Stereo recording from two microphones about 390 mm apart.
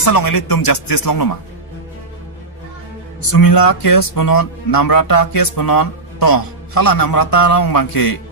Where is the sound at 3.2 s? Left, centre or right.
Left.